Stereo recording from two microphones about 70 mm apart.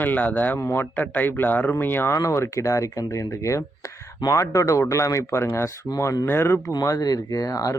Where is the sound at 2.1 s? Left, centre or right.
Left.